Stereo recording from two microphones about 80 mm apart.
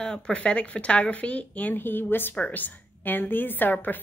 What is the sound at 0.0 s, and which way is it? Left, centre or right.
A woman's voice, centre.